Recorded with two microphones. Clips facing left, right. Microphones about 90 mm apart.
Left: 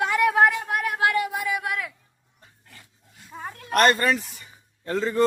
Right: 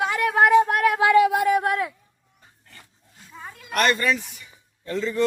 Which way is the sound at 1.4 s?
45° right (ahead or behind).